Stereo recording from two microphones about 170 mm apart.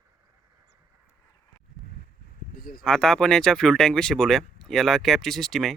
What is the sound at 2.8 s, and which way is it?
Speech, 5° left (ahead or behind).